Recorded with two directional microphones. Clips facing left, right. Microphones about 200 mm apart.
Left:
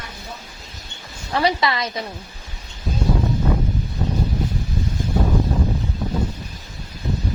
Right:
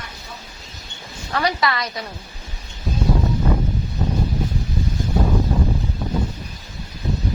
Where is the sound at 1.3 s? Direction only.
25° left (ahead or behind).